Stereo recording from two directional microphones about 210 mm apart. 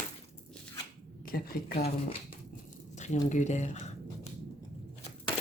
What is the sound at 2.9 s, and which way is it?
Squish, 35° left (ahead or behind).